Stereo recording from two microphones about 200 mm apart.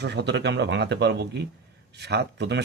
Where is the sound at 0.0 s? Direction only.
60° right (ahead or behind).